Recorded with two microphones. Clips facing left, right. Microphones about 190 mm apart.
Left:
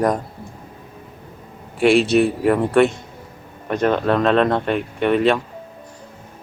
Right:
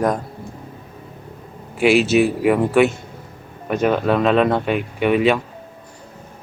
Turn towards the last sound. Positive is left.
turn(degrees=-5)  # may be behind; listen again after turning